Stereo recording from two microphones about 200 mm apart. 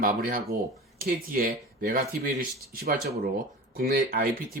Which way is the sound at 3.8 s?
45° right (ahead or behind).